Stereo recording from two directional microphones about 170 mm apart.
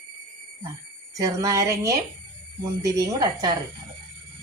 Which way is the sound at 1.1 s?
20° right (ahead or behind).